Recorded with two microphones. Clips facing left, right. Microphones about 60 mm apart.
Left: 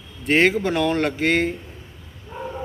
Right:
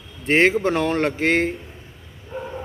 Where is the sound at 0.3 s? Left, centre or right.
Right.